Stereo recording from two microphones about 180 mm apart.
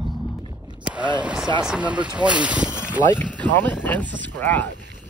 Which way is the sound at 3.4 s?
10° left (ahead or behind).